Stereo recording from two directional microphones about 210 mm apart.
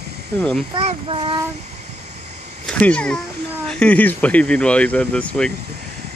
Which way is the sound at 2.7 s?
5° left (ahead or behind).